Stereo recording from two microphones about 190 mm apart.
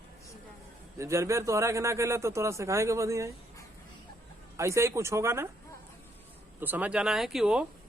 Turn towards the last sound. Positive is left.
turn(degrees=-5)  # may be behind; listen again after turning